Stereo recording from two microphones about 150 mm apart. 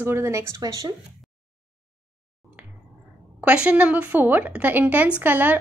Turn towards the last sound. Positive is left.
turn(degrees=-10)  # may be behind; listen again after turning